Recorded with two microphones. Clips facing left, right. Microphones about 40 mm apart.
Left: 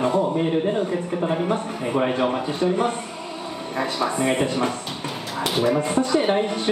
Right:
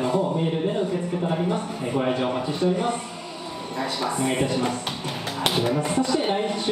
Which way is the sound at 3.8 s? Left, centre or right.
Left.